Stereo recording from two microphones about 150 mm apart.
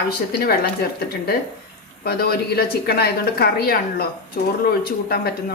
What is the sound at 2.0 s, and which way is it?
Speech, 90° left.